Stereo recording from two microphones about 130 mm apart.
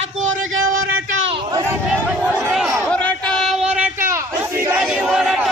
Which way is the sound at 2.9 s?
10° left (ahead or behind).